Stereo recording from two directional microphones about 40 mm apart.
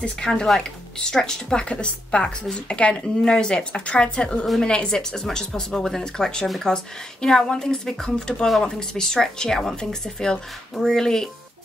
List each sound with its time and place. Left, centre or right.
0.2 s speech: centre